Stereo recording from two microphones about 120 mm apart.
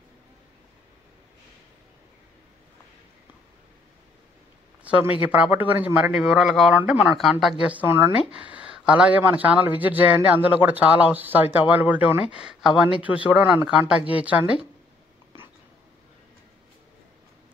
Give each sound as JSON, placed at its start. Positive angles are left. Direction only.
{"t": 4.9, "sound": "a man's voice", "side_deg": -10}
{"t": 6.1, "sound": "speech", "side_deg": -5}
{"t": 7.7, "sound": "speech", "side_deg": -15}